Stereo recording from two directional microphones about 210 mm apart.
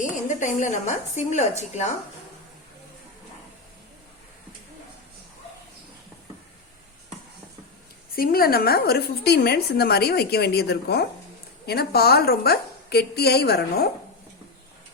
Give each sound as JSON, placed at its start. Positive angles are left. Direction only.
{"t": 0.0, "sound": "speech", "side_deg": 35}
{"t": 8.1, "sound": "a woman's voice", "side_deg": 45}